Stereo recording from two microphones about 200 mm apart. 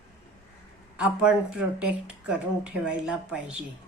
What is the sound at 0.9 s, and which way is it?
A woman's voice, 5° right (ahead or behind).